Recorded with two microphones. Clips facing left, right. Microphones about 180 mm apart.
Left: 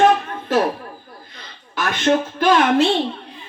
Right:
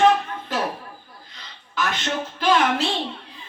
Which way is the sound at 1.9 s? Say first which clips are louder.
Left 14 dB; 55° left (ahead or behind).